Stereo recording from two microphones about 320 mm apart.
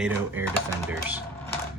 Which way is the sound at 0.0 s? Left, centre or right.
Centre.